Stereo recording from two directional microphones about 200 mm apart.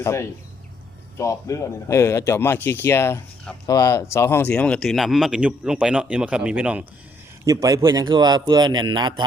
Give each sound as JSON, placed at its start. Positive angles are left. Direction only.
{"t": 0.0, "sound": "a man's voice", "side_deg": 15}
{"t": 7.4, "sound": "a man's voice", "side_deg": -15}